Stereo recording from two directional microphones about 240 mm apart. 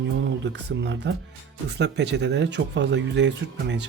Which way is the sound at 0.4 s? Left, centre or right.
Right.